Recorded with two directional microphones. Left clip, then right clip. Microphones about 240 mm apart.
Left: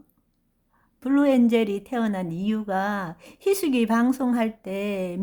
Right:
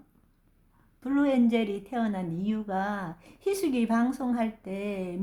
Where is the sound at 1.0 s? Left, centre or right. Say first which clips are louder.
Left 5 dB; left.